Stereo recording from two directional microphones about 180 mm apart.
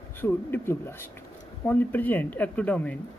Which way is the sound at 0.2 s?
10° left (ahead or behind).